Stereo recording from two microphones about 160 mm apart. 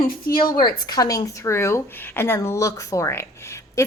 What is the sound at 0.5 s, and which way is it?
A woman's voice, 25° left (ahead or behind).